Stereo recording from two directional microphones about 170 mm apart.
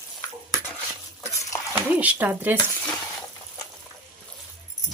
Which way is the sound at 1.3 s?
20° left (ahead or behind).